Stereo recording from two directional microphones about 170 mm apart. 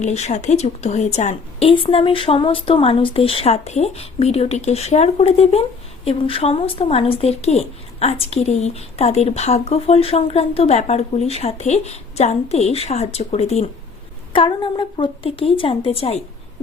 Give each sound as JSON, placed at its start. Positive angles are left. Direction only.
{"t": 0.0, "sound": "a woman's voice", "side_deg": 45}